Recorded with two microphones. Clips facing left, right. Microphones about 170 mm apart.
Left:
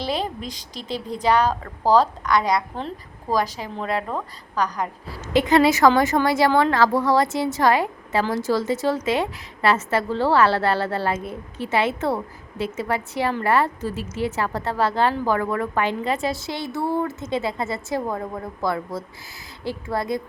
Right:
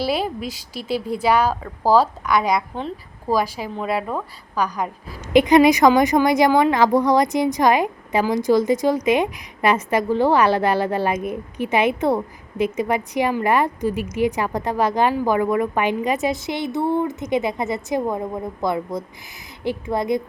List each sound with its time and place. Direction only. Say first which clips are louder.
0.0 s a woman's voice: right 4 dB; 10° right (ahead or behind)